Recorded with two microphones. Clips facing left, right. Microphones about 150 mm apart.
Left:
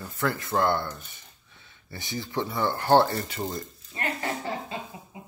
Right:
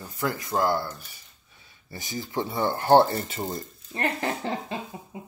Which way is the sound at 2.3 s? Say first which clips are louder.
Right 1 dB; 20° right (ahead or behind).